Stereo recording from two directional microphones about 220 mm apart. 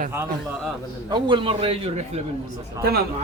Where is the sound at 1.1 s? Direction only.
20° right (ahead or behind).